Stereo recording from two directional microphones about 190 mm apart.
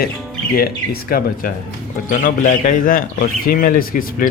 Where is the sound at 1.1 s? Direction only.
50° left (ahead or behind).